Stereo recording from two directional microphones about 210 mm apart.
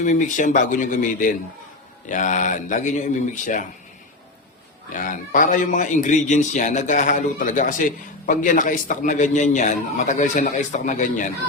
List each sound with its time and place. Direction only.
0.0 s a man's voice: 35° left (ahead or behind)
4.9 s a man's voice: 40° left (ahead or behind)